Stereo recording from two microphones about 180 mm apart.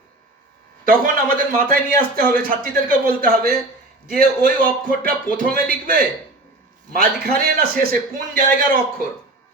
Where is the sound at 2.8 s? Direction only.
55° right (ahead or behind).